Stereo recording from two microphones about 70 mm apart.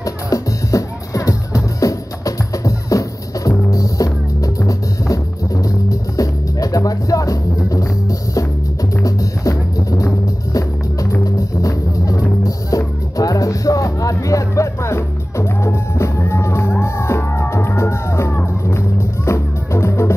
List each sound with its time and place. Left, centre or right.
0.0 s music: left